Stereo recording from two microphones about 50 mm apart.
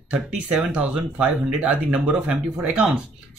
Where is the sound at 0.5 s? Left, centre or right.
Centre.